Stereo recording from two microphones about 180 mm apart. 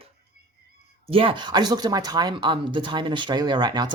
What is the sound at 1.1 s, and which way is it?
Speech, 30° right (ahead or behind).